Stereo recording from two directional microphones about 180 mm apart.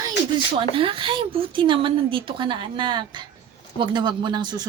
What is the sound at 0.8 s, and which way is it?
Speech, 30° right (ahead or behind).